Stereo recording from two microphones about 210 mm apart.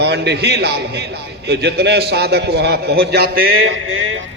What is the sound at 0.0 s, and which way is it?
A man's voice, 50° right (ahead or behind).